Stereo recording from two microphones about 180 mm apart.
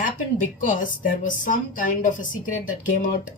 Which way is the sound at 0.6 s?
45° left (ahead or behind).